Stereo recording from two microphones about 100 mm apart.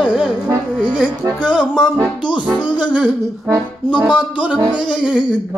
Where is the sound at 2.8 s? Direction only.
10° right (ahead or behind).